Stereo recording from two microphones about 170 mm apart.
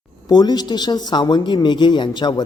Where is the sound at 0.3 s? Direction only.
25° left (ahead or behind).